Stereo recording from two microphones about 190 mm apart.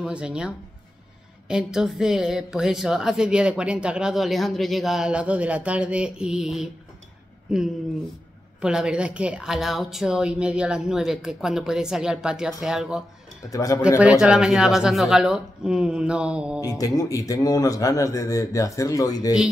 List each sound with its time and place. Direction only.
0.0 s a woman's voice: 5° right (ahead or behind)
13.5 s speech: 20° left (ahead or behind)
13.8 s a woman's voice: 5° right (ahead or behind)
16.6 s speech: 20° left (ahead or behind)